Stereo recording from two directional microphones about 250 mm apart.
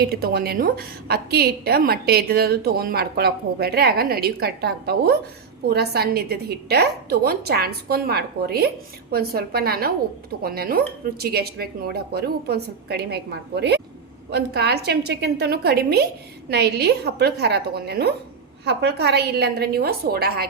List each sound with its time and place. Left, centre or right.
0.0 s a woman's voice: right